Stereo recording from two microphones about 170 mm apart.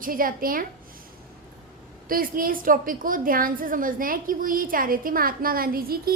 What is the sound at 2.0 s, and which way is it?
A woman's voice, 55° right (ahead or behind).